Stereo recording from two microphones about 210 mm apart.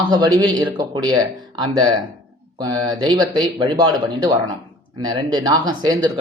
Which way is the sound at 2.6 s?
20° right (ahead or behind).